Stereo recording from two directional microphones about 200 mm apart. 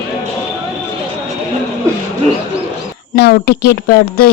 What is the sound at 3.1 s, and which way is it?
Speech, 50° left (ahead or behind).